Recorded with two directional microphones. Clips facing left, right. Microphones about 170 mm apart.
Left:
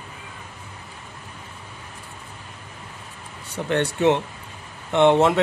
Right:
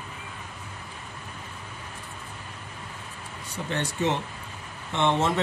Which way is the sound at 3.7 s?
65° left (ahead or behind).